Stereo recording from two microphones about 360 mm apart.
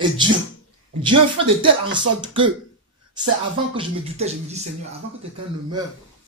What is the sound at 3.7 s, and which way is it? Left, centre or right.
Speech, centre.